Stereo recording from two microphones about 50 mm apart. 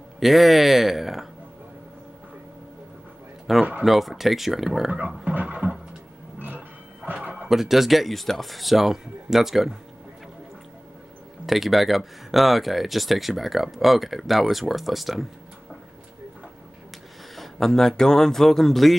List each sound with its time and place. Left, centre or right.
0.2 s speech: centre
3.5 s speech: centre
5.3 s a sound: right
7.2 s a sound: right
7.4 s speech: centre
11.4 s speech: centre
17.4 s a man's voice: centre